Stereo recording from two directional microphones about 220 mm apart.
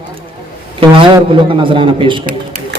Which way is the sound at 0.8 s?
20° right (ahead or behind).